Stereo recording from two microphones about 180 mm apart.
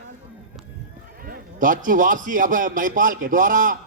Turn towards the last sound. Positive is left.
turn(degrees=-50)  # may be behind; listen again after turning